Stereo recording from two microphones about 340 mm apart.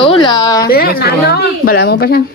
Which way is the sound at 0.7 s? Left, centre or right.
Left.